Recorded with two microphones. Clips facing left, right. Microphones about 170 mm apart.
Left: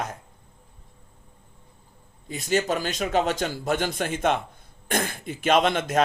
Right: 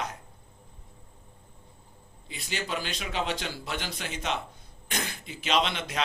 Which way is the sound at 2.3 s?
45° left (ahead or behind).